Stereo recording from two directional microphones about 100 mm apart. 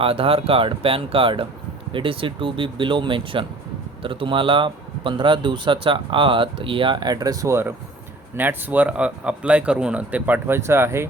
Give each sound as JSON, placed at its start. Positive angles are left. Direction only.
{"t": 0.0, "sound": "speech", "side_deg": -65}
{"t": 8.4, "sound": "speech", "side_deg": -20}